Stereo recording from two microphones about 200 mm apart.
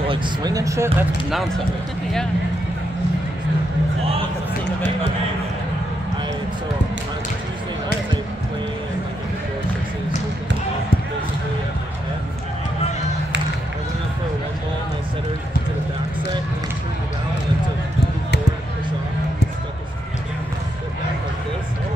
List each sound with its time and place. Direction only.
0.1 s speech: 20° right (ahead or behind)